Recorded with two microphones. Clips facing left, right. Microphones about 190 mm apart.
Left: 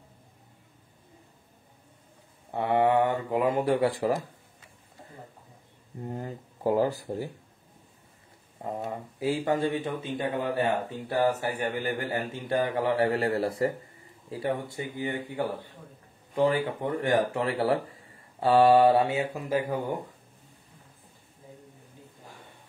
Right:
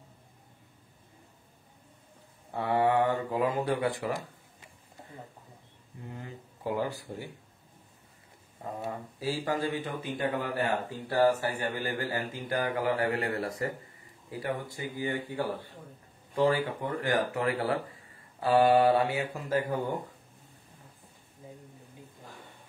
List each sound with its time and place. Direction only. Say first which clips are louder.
2.5 s speech: left 3 dB; 20° left (ahead or behind)
5.9 s speech: left 7 dB; 40° left (ahead or behind)
8.6 s speech: left 3 dB; 20° left (ahead or behind)